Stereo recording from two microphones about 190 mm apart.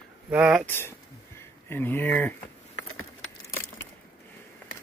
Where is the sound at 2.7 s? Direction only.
90° left.